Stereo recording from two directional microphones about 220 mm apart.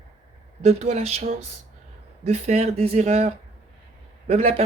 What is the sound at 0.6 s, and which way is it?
Speech, 30° right (ahead or behind).